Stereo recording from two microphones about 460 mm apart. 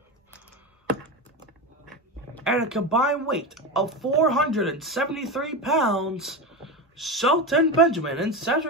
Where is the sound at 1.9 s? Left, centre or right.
Centre.